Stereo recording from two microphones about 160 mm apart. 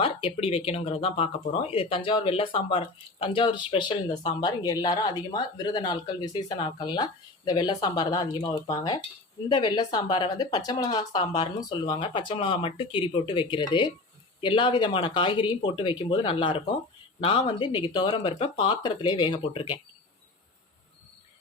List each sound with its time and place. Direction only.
0.0 s speech: 35° left (ahead or behind)